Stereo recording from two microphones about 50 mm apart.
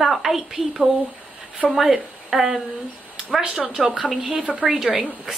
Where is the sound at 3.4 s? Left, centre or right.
Centre.